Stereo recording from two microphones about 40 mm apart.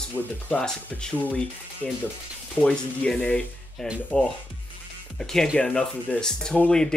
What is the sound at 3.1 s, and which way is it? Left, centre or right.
Speech, left.